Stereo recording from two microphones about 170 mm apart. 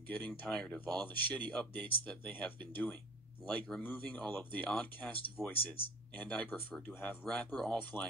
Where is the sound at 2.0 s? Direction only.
5° left (ahead or behind).